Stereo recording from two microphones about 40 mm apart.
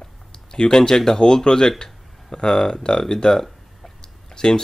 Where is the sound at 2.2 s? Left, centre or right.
Centre.